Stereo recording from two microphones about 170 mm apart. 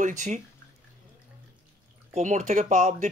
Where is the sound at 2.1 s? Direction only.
45° right (ahead or behind).